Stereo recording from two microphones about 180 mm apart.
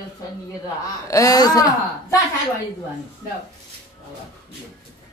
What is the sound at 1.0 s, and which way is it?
A woman's voice, 20° left (ahead or behind).